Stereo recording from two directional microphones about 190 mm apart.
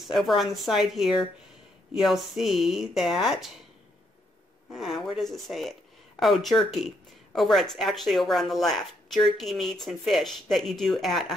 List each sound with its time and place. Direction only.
0.0 s speech: centre (ahead or behind)
5.0 s speech: centre (ahead or behind)